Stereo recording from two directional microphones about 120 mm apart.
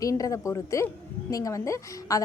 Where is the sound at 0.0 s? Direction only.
30° left (ahead or behind).